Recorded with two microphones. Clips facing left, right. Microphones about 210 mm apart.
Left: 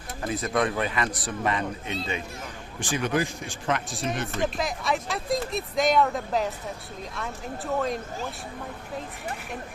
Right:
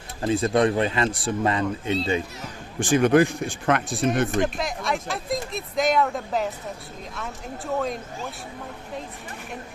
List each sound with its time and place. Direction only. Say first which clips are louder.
0.2 s speech: right 6 dB; 30° right (ahead or behind)
2.8 s speech: right 9 dB; 50° right (ahead or behind)
4.5 s speech: even; centre (ahead or behind)